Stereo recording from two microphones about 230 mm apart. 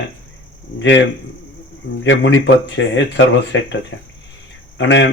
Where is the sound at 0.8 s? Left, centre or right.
Left.